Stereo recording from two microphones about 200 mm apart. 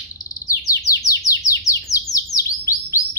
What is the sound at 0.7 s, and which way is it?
Bird, 15° left (ahead or behind).